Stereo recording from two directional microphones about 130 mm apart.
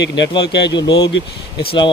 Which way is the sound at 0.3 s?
35° left (ahead or behind).